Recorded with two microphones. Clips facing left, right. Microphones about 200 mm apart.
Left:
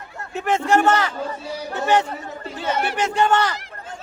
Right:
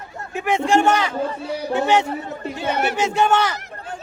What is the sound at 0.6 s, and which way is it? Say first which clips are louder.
Speech: right 1 dB; 25° right (ahead or behind).